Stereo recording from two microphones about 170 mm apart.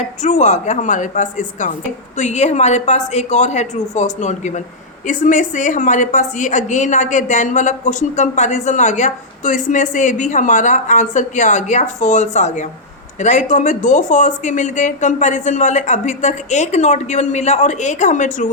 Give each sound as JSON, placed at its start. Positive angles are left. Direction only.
{"t": 0.0, "sound": "a woman's voice", "side_deg": 45}